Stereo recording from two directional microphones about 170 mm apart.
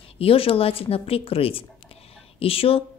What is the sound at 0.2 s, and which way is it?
Speech, 35° left (ahead or behind).